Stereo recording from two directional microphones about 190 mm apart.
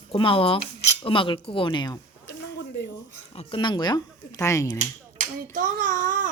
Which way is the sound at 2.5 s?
65° left (ahead or behind).